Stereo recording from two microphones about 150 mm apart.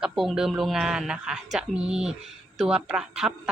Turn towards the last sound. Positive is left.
turn(degrees=-5)  # may be behind; listen again after turning